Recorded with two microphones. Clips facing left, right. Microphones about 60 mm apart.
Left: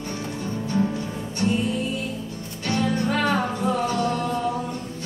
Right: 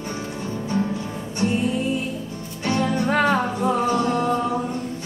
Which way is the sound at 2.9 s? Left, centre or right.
Right.